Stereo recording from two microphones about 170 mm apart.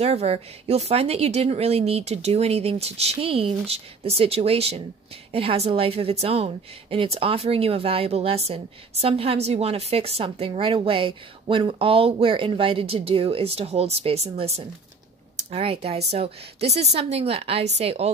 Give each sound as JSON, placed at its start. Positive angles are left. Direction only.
{"t": 0.0, "sound": "a woman's voice", "side_deg": -40}